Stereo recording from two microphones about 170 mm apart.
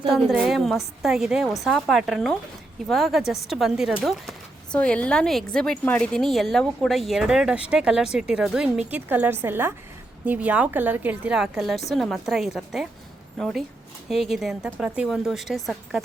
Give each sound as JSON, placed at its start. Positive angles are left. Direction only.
{"t": 0.1, "sound": "a woman's voice", "side_deg": 0}